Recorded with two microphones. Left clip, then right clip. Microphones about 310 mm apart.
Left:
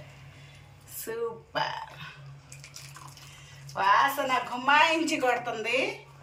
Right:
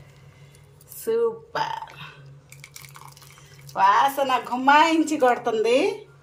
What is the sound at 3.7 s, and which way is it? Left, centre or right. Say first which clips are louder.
Speech: right 5 dB; right.